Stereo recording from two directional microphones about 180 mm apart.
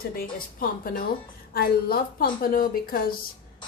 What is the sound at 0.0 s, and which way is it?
A woman's voice, 55° left (ahead or behind).